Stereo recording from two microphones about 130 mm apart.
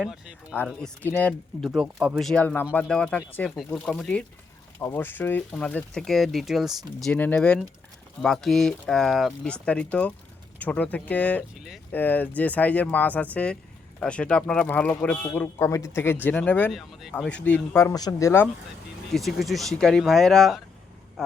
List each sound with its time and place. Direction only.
0.0 s speech: 5° right (ahead or behind)
1.0 s speech: 15° left (ahead or behind)
1.3 s speech: centre (ahead or behind)
2.4 s speech: 10° left (ahead or behind)
3.5 s speech: centre (ahead or behind)
4.8 s speech: 20° left (ahead or behind); by 7.2 s centre (ahead or behind)
7.2 s speech: 10° left (ahead or behind)
11.5 s speech: 5° right (ahead or behind)
11.9 s a man's voice: 15° left (ahead or behind)
16.7 s speech: centre (ahead or behind)
17.2 s speech: 10° left (ahead or behind)
17.7 s a man's voice: 25° left (ahead or behind)
19.1 s speech: centre (ahead or behind)